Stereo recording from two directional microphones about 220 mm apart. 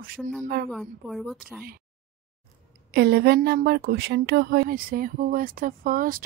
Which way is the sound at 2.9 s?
50° right (ahead or behind).